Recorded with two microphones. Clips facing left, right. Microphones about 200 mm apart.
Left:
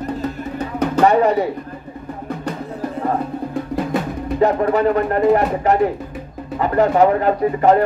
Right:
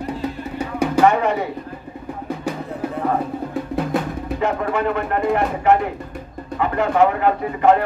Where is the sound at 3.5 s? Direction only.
Centre (ahead or behind).